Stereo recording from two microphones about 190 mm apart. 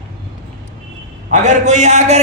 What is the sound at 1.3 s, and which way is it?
Speech, 40° right (ahead or behind).